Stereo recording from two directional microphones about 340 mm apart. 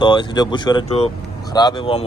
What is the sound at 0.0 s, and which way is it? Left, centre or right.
Speech, centre.